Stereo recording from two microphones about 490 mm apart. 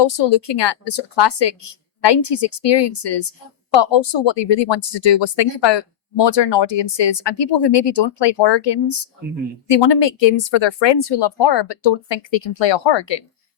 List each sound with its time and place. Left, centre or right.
0.2 s speech: left
4.0 s speech: left